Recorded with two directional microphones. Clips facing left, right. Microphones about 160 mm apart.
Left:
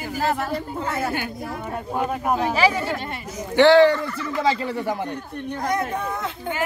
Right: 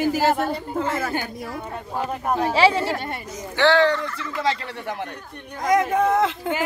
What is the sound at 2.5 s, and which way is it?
Speech, 25° right (ahead or behind).